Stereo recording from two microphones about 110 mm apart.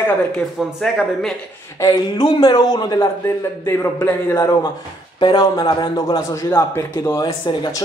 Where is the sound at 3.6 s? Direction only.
25° left (ahead or behind).